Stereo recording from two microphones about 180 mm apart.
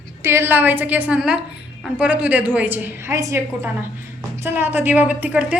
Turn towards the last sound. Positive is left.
turn(degrees=-10)  # may be behind; listen again after turning